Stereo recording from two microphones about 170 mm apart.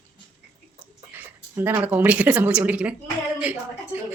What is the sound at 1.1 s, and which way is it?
A woman's voice, 10° right (ahead or behind).